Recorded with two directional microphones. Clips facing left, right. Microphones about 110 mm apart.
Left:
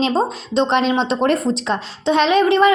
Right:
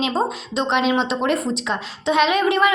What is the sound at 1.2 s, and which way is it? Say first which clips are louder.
A woman's voice: left 4 dB; 40° left (ahead or behind).